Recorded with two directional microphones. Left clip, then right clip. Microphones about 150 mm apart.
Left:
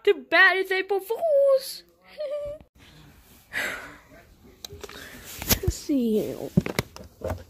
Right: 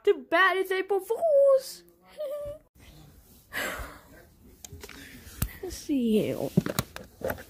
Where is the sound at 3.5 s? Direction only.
30° right (ahead or behind).